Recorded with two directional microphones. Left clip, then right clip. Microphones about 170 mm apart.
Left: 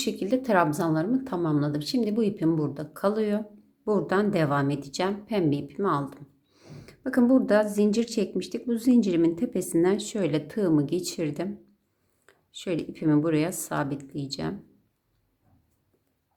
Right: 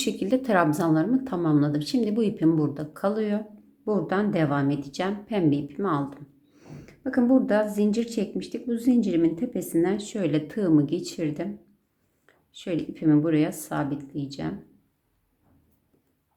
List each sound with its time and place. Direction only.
0.0 s a woman's voice: 10° left (ahead or behind)